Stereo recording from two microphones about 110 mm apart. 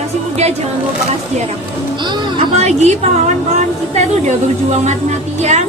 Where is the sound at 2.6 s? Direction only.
80° right.